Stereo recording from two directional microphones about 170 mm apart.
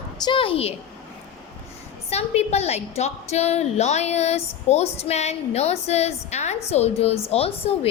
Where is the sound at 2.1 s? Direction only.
40° left (ahead or behind).